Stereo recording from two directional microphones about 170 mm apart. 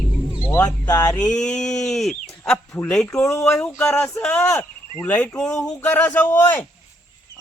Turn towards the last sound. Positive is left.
turn(degrees=10)  # may be behind; listen again after turning